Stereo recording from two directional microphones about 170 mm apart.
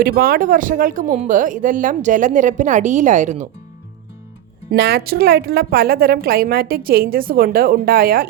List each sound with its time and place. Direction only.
0.0 s speech: 60° right (ahead or behind)
4.7 s speech: 75° right (ahead or behind)